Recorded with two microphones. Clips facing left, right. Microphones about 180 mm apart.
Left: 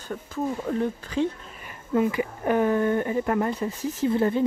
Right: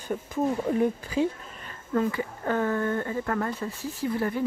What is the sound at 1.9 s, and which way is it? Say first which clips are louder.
Speech: left 3 dB; 15° left (ahead or behind).